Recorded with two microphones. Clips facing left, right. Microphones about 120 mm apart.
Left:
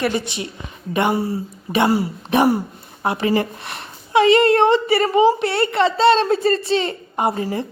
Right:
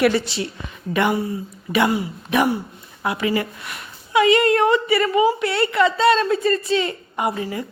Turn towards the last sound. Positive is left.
turn(degrees=35)  # may be behind; listen again after turning